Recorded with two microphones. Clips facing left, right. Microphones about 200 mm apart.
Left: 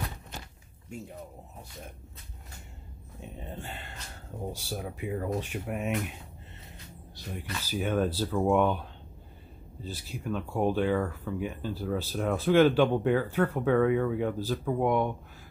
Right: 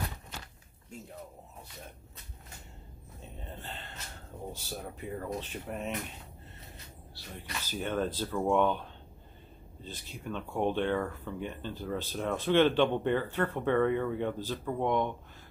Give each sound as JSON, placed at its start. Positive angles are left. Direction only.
{"t": 3.2, "sound": "speech", "side_deg": 15}
{"t": 7.3, "sound": "speech", "side_deg": 10}